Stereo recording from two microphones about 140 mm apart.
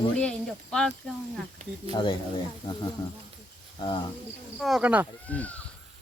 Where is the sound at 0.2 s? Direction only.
5° left (ahead or behind).